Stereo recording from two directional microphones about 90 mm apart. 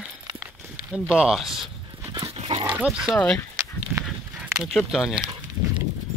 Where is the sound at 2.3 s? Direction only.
90° right.